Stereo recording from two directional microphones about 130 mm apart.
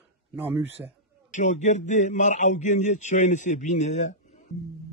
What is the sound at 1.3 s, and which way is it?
Speech, 70° left (ahead or behind).